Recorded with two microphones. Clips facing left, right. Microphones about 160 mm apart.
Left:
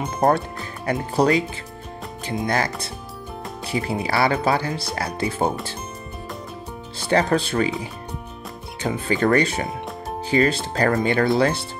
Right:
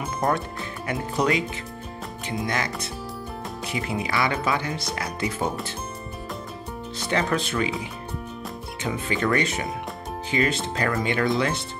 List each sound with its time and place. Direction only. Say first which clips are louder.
0.8 s speech: left 5 dB; 35° left (ahead or behind)
2.4 s speech: left 5 dB; 35° left (ahead or behind)
7.0 s speech: left 5 dB; 35° left (ahead or behind)
8.8 s speech: left 5 dB; 40° left (ahead or behind)